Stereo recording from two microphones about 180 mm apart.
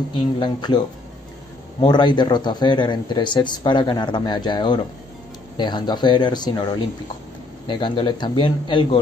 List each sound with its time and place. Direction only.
0.4 s speech: 25° left (ahead or behind)
1.9 s speech: 25° left (ahead or behind)